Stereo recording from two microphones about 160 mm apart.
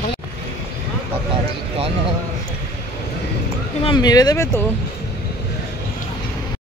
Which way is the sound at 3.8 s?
25° left (ahead or behind).